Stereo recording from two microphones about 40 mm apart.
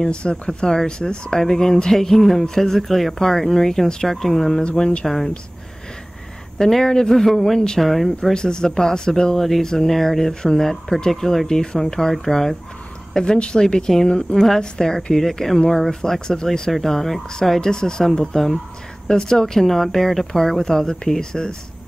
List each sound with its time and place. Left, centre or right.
0.1 s speech: left
4.7 s speech: left
5.0 s speech: centre
6.6 s speech: centre
8.2 s speech: centre
13.1 s speech: left